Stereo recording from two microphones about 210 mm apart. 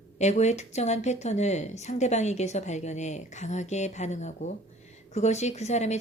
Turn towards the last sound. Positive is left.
turn(degrees=35)  # may be behind; listen again after turning